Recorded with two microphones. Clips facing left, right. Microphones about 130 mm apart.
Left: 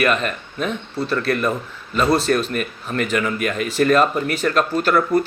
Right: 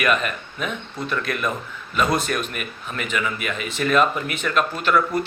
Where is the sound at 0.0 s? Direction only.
35° left (ahead or behind).